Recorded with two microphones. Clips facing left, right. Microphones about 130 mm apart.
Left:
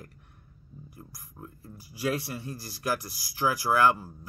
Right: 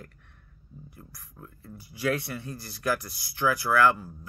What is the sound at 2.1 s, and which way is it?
Speech, 30° left (ahead or behind).